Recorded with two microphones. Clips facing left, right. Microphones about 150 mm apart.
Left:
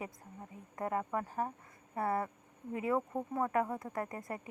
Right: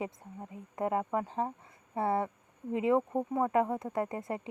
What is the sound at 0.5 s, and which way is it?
Speech, 20° right (ahead or behind).